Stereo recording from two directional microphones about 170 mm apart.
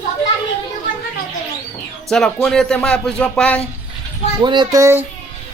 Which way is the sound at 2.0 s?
5° left (ahead or behind).